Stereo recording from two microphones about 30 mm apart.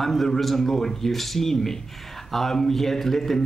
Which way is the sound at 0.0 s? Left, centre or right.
Centre.